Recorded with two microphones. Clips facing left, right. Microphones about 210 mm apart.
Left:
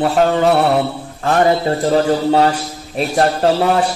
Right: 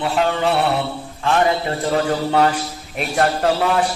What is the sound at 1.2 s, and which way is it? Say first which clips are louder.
A man's voice: left 4 dB; 40° left (ahead or behind).